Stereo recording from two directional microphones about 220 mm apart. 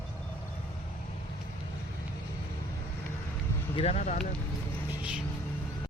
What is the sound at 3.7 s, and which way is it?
Speech, 30° left (ahead or behind).